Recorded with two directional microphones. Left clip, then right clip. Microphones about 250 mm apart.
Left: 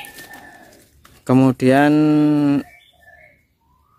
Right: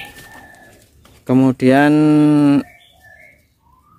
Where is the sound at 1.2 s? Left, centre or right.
Centre.